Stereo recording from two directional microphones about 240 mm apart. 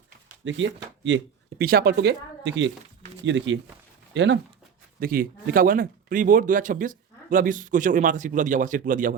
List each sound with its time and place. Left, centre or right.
0.4 s speech: right
4.9 s speech: right